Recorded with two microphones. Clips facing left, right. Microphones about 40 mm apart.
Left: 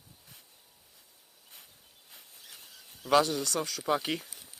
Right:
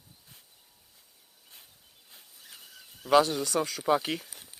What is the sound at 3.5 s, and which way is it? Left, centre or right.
Speech, right.